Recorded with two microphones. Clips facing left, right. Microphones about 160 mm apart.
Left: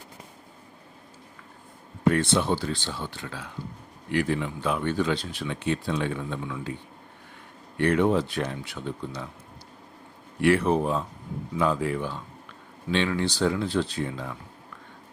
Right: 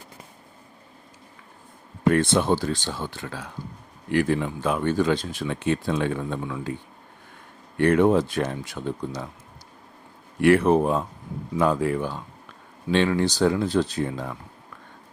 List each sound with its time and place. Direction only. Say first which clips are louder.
2.0 s speech: right 3 dB; 50° right (ahead or behind)
7.8 s speech: right 4 dB; 50° right (ahead or behind)
10.4 s speech: right 4 dB; 55° right (ahead or behind)